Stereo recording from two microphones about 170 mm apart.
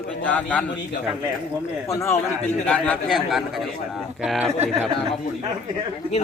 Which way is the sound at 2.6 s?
5° left (ahead or behind).